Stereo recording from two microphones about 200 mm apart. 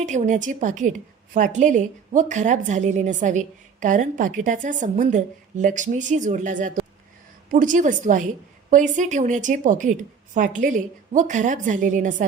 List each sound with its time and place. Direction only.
0.0 s a woman's voice: 35° right (ahead or behind)